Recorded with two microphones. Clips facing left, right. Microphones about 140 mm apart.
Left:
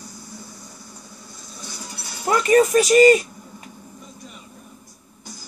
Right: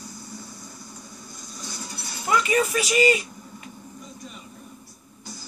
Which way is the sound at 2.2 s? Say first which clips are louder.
Left 6 dB; 45° left (ahead or behind).